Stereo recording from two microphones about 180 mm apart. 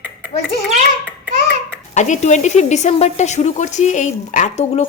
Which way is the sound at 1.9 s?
40° left (ahead or behind).